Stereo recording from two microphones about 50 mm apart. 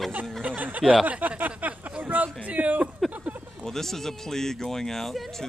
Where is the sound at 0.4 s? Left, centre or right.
Right.